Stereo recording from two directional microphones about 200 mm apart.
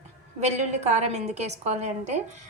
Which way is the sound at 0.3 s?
35° right (ahead or behind).